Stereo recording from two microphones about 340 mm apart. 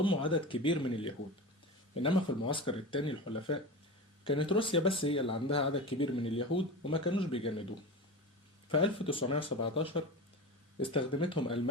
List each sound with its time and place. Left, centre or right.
0.0 s speech: centre
8.7 s speech: centre